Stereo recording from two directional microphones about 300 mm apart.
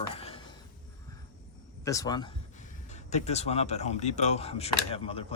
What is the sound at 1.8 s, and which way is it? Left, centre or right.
Speech, centre.